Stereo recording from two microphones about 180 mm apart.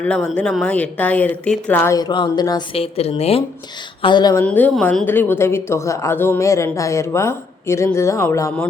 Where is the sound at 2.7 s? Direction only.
35° left (ahead or behind).